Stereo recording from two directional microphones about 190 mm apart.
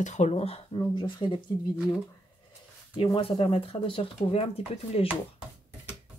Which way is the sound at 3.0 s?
30° left (ahead or behind).